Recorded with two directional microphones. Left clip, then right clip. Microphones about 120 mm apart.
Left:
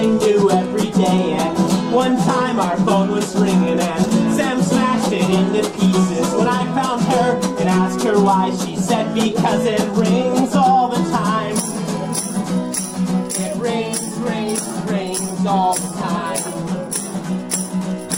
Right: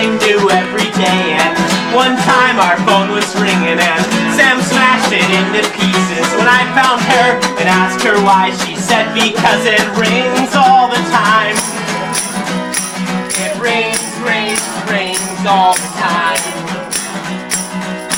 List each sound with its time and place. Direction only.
0.2 s music: 25° right (ahead or behind)
1.1 s music: 40° right (ahead or behind)
3.9 s music: 25° right (ahead or behind)
14.3 s music: 25° right (ahead or behind)